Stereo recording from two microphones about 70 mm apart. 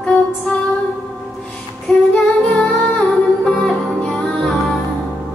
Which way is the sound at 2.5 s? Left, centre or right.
Centre.